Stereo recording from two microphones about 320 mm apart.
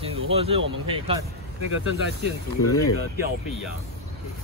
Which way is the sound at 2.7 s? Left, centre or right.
Left.